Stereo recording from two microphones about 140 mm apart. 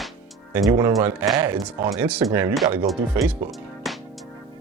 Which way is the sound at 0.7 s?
20° right (ahead or behind).